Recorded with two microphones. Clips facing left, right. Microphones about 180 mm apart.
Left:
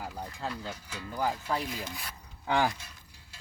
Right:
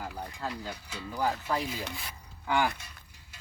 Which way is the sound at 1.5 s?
5° right (ahead or behind).